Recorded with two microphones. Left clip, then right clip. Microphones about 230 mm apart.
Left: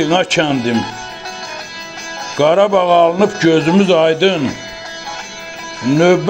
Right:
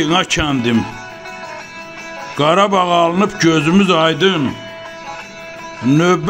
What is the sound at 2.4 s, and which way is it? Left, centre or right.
Speech, right.